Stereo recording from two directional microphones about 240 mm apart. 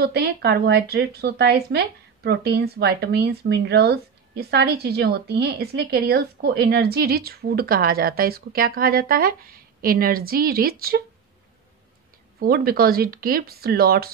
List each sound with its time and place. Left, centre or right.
0.0 s speech: right
12.4 s speech: right